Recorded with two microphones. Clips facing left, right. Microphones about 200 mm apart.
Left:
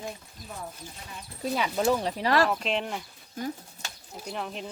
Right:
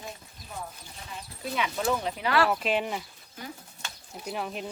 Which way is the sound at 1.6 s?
35° left (ahead or behind).